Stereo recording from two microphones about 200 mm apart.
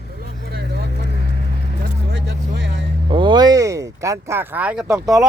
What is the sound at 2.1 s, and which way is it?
Music, 60° right (ahead or behind).